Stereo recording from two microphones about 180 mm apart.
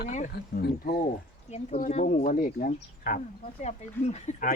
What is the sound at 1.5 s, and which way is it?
Speech, 40° left (ahead or behind).